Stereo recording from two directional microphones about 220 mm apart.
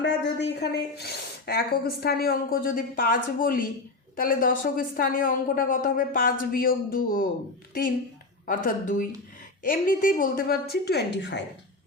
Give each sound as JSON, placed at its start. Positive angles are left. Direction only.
{"t": 0.0, "sound": "a woman's voice", "side_deg": 50}